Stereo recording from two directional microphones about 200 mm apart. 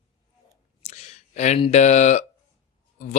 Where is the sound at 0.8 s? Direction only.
35° left (ahead or behind).